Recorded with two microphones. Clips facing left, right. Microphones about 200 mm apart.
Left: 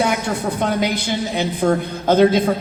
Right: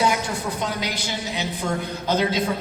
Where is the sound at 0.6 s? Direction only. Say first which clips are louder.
Left 8 dB; 55° left (ahead or behind).